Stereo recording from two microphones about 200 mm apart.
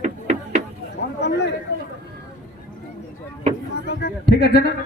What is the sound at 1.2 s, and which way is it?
Speech, 55° left (ahead or behind).